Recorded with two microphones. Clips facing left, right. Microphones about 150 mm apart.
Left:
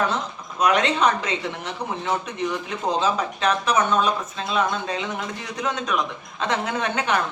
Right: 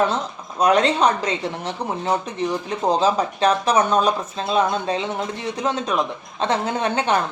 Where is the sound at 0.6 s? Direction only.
35° right (ahead or behind).